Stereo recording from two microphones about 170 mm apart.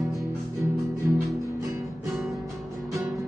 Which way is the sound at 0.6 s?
20° right (ahead or behind).